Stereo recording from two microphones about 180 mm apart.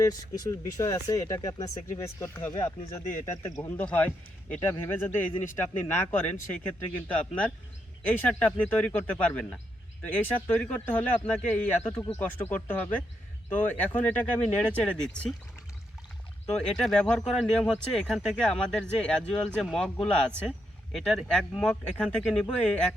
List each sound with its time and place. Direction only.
0.0 s speech: 20° left (ahead or behind); by 15.3 s 5° left (ahead or behind)
16.6 s speech: 5° left (ahead or behind)